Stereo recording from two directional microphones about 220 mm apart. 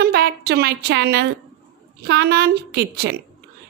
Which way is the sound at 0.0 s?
45° right (ahead or behind).